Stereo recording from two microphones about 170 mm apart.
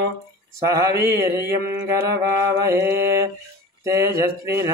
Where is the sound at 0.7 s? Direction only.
15° right (ahead or behind).